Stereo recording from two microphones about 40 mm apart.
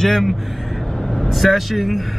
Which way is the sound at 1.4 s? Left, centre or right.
Centre.